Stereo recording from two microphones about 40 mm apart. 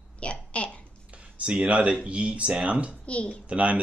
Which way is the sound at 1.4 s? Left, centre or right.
Right.